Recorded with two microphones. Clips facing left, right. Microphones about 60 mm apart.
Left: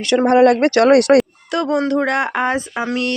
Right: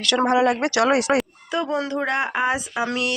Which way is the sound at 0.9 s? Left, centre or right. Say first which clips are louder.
Left 9 dB; left.